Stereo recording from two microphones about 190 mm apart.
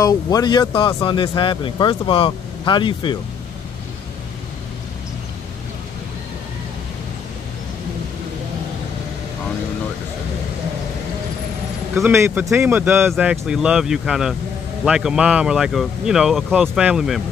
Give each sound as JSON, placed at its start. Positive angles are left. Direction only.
{"t": 0.0, "sound": "speech", "side_deg": 20}
{"t": 11.9, "sound": "a man's voice", "side_deg": -15}